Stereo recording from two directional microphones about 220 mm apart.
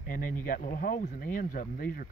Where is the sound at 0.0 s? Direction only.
40° left (ahead or behind).